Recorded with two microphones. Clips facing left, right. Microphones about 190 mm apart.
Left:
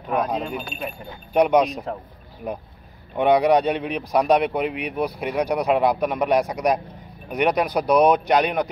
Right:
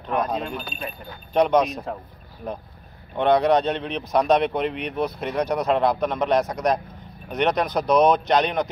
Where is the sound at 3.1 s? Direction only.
10° left (ahead or behind).